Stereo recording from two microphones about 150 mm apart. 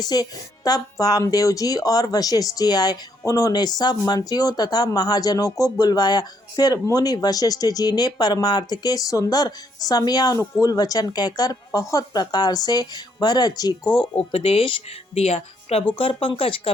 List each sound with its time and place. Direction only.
0.0 s speech: 25° left (ahead or behind)